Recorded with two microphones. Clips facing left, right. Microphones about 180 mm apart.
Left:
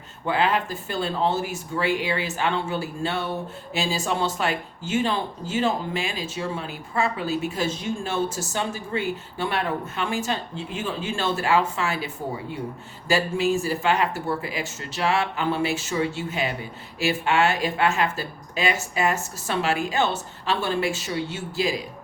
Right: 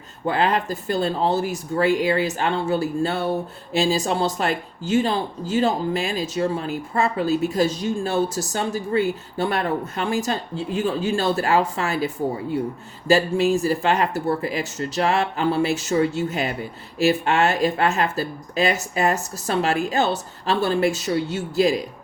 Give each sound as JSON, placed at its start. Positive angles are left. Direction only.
{"t": 0.3, "sound": "speech", "side_deg": -40}